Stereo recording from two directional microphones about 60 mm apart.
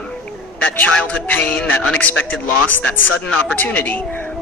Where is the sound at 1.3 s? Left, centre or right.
Left.